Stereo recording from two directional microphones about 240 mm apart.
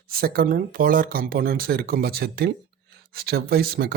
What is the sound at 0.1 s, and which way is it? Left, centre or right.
Speech, right.